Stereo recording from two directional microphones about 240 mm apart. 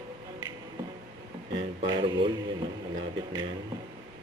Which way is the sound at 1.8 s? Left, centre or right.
Centre.